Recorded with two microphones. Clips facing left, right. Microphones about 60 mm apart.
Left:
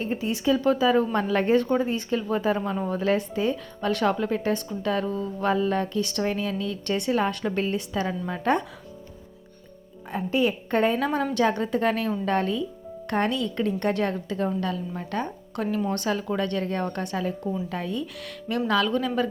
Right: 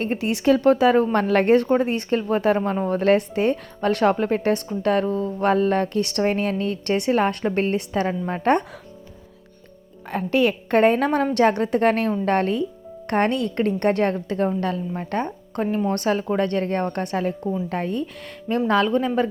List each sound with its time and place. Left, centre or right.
0.0 s a woman's voice: right
10.1 s a woman's voice: right
10.8 s speech: right
18.0 s speech: right